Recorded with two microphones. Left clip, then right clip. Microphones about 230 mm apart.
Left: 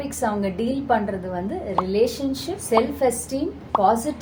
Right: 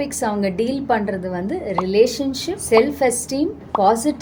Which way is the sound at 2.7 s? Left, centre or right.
Right.